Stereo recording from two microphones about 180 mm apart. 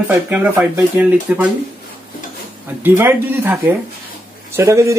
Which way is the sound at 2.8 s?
10° right (ahead or behind).